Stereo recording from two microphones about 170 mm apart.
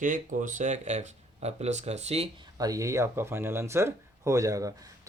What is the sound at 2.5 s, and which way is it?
Speech, 20° right (ahead or behind).